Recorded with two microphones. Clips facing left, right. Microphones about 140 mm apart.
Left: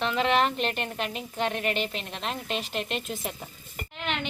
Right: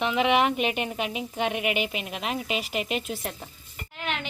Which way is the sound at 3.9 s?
5° right (ahead or behind).